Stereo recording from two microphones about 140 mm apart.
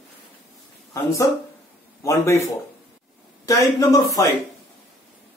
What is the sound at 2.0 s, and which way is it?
Speech, 20° left (ahead or behind).